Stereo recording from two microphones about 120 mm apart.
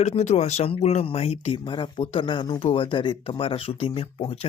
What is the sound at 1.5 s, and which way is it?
Speech, 40° left (ahead or behind).